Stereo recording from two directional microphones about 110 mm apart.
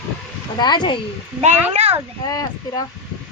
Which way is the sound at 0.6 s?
45° left (ahead or behind).